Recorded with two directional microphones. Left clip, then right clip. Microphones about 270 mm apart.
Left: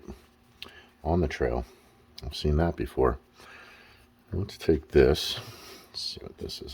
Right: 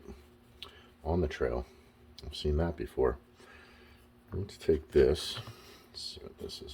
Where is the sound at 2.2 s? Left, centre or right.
Left.